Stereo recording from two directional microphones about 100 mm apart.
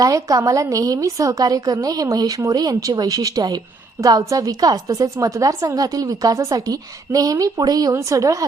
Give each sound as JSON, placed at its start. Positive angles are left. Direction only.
{"t": 0.0, "sound": "a woman's voice", "side_deg": -35}